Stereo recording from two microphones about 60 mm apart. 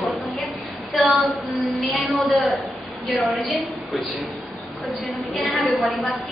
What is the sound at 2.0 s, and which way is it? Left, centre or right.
A woman's voice, centre.